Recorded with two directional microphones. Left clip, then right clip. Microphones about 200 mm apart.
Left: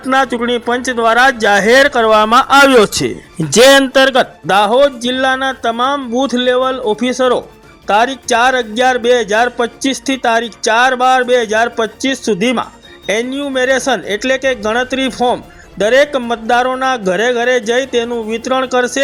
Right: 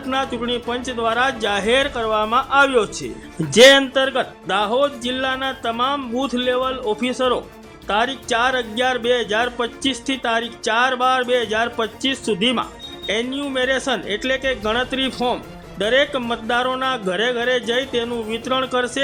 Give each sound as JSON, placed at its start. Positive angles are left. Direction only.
{"t": 0.1, "sound": "speech", "side_deg": 35}